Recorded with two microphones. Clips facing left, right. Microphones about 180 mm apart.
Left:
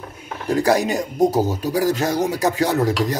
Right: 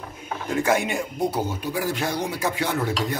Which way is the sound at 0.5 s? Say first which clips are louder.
Left 5 dB; 35° left (ahead or behind).